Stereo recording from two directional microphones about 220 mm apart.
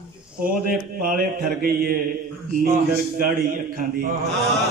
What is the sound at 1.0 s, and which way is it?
Mantra, 40° right (ahead or behind).